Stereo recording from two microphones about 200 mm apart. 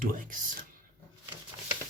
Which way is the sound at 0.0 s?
45° right (ahead or behind).